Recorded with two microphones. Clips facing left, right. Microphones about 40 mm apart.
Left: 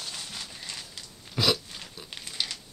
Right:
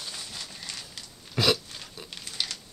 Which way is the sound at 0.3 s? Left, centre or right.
Centre.